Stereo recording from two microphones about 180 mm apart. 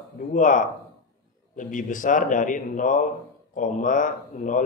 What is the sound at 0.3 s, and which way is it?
Speech, 45° left (ahead or behind).